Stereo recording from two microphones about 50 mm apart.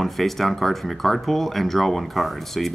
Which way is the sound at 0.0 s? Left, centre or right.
Centre.